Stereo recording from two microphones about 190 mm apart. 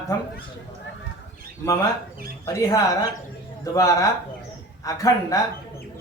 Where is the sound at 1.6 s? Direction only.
15° left (ahead or behind).